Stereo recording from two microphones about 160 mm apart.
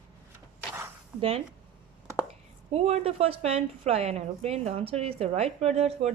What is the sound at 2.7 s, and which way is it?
A woman's voice, 40° right (ahead or behind).